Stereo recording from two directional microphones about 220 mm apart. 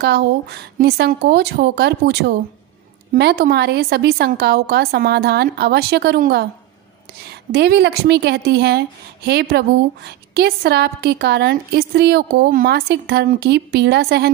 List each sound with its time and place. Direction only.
0.0 s speech: 50° right (ahead or behind)